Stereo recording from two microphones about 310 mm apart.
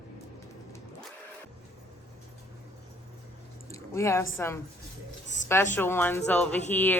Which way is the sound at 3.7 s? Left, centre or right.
Centre.